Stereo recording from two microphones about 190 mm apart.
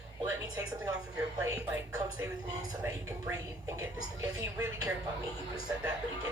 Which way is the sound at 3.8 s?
15° right (ahead or behind).